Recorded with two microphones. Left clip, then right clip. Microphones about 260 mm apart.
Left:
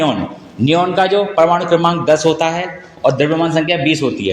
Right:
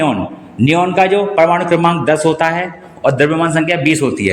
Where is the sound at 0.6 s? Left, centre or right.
Right.